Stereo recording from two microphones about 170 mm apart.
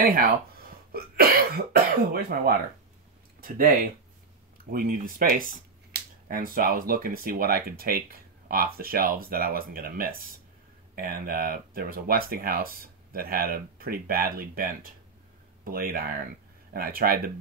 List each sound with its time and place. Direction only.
0.0 s speech: 60° right (ahead or behind)